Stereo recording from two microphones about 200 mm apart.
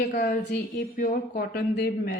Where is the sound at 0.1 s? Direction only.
40° left (ahead or behind).